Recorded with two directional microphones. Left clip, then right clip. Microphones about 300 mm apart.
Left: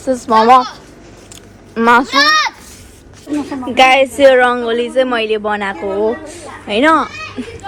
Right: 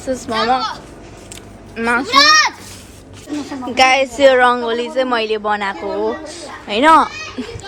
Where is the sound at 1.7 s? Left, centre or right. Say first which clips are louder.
Left 7 dB; centre.